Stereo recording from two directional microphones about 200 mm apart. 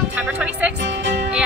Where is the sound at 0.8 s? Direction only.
65° right (ahead or behind).